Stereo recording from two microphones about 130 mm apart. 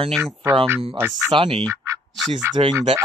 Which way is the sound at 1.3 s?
40° right (ahead or behind).